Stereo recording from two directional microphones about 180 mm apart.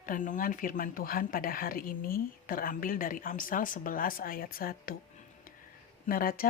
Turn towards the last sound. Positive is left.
turn(degrees=55)  # may be behind; listen again after turning